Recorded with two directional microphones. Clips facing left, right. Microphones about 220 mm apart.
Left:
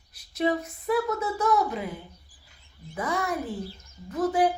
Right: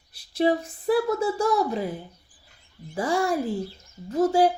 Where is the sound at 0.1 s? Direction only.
30° right (ahead or behind).